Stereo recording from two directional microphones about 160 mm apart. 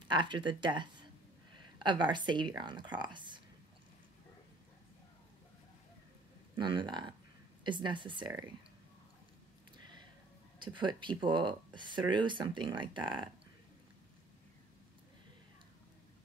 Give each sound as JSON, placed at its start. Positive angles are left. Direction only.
{"t": 0.1, "sound": "speech", "side_deg": -30}
{"t": 6.5, "sound": "speech", "side_deg": -30}
{"t": 10.6, "sound": "speech", "side_deg": -30}